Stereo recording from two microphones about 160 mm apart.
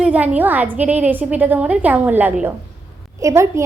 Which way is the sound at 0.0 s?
10° right (ahead or behind).